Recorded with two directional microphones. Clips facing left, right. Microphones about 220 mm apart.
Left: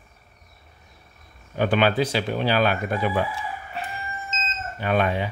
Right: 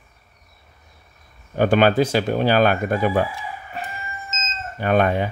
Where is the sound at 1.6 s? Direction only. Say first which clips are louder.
Right 4 dB; 45° right (ahead or behind).